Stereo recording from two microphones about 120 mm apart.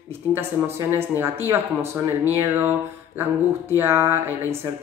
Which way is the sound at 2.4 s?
15° right (ahead or behind).